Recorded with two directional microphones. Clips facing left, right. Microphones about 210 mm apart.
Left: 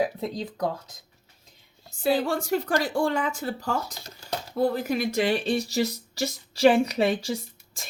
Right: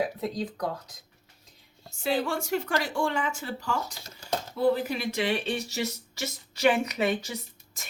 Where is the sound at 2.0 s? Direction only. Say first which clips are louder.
Left 4 dB; 35° left (ahead or behind).